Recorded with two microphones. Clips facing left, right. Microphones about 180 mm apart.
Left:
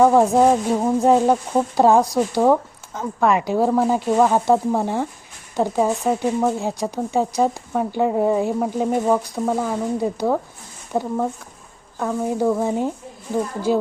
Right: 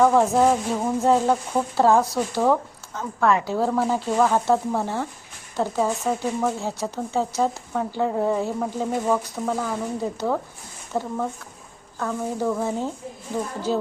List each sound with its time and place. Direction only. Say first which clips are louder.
0.0 s speech: left 3 dB; 15° left (ahead or behind)